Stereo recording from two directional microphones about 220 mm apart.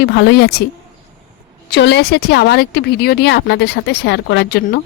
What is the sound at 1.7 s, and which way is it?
A woman's voice, 50° left (ahead or behind).